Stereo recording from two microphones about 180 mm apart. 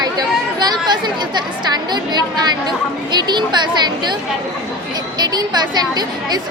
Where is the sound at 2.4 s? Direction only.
25° right (ahead or behind).